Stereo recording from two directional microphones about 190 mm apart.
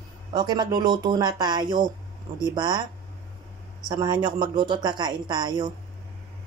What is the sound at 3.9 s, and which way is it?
A woman's voice, 20° right (ahead or behind).